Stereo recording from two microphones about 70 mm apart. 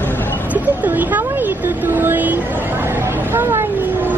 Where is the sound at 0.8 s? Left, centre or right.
Right.